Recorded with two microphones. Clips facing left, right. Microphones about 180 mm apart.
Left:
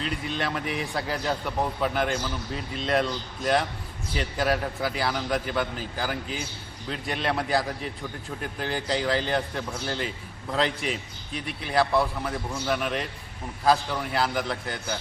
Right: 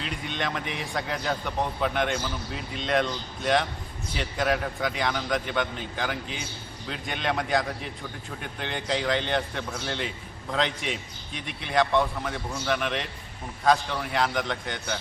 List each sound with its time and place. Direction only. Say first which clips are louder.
0.0 s a man's voice: left 2 dB; centre (ahead or behind)